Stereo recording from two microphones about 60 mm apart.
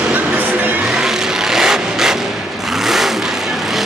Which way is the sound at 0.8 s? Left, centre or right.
Centre.